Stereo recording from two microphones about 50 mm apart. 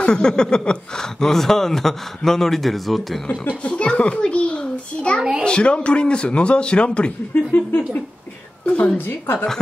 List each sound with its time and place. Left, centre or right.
0.0 s speech: centre
3.6 s a child's voice: left
7.5 s a woman's voice: left
9.0 s a woman's voice: left